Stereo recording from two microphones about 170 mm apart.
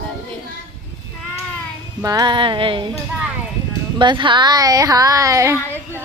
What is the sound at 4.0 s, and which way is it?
Speech, 30° right (ahead or behind).